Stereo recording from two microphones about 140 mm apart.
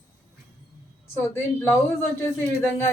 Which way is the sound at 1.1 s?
20° left (ahead or behind).